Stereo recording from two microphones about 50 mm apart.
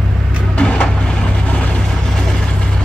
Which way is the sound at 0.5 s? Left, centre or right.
Left.